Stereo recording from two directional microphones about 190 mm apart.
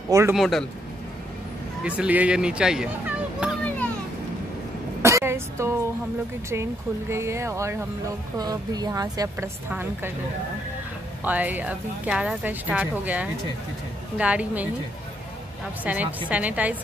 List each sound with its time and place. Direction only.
0.3 s speech: centre (ahead or behind)
1.9 s speech: 5° right (ahead or behind)
5.0 s a woman's voice: 15° right (ahead or behind)
11.2 s a woman's voice: 10° right (ahead or behind)
15.8 s a woman's voice: 10° right (ahead or behind)